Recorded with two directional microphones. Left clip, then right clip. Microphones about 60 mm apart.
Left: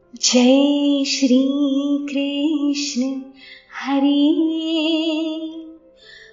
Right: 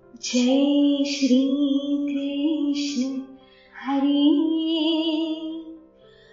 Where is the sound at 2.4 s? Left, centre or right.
Left.